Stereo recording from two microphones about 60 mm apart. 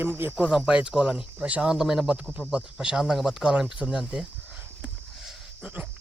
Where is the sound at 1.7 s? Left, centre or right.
Centre.